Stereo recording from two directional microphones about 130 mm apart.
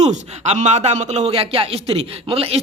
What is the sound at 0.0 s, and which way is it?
Speech, 60° right (ahead or behind).